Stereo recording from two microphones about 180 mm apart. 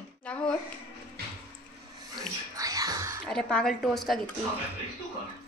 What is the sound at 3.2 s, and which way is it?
Speech, 5° left (ahead or behind).